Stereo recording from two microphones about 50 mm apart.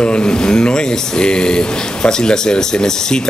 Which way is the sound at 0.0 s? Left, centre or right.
Centre.